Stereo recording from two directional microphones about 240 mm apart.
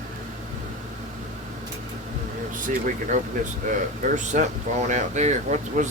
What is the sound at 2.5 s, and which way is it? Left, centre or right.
Speech, right.